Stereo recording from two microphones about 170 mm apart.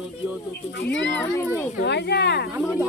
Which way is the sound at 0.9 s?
90° left.